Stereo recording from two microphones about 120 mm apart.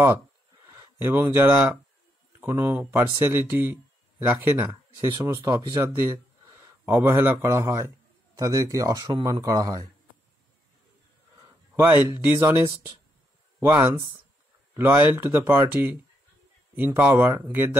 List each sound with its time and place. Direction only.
0.9 s speech: 20° right (ahead or behind)
4.9 s speech: 40° right (ahead or behind)
5.2 s speech: 25° right (ahead or behind)
6.9 s speech: 20° right (ahead or behind)
11.7 s speech: 15° right (ahead or behind)
14.7 s speech: 20° right (ahead or behind)